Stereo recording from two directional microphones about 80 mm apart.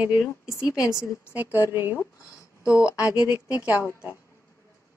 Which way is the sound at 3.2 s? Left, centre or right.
Centre.